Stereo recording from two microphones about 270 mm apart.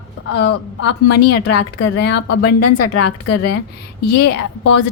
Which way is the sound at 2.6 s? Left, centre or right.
Left.